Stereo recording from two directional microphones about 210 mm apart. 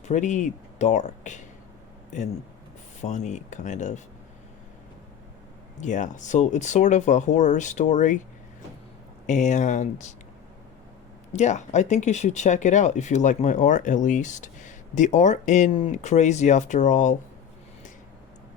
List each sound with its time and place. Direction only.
0.0 s speech: 35° left (ahead or behind)
3.0 s speech: 35° left (ahead or behind)
5.7 s speech: 35° left (ahead or behind)
9.2 s speech: 35° left (ahead or behind)
11.3 s speech: 35° left (ahead or behind)